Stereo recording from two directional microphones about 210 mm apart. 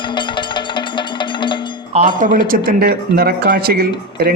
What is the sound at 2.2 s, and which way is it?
Speech, 40° right (ahead or behind).